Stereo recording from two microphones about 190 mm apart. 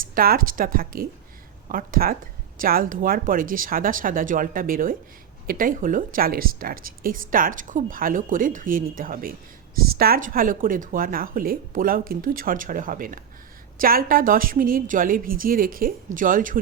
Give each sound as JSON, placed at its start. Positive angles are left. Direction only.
{"t": 0.1, "sound": "a woman's voice", "side_deg": -50}